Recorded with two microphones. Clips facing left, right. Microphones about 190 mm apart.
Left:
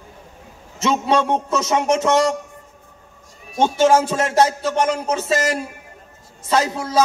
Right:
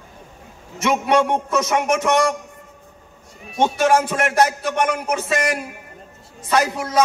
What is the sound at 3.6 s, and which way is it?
A man's voice, 25° left (ahead or behind).